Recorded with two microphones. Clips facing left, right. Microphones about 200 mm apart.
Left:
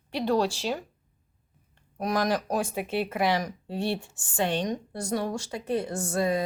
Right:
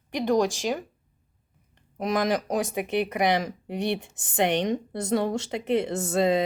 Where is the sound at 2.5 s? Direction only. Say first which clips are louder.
Right 2 dB; 15° right (ahead or behind).